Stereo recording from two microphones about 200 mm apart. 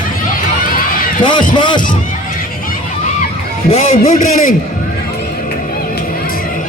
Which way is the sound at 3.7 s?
35° left (ahead or behind).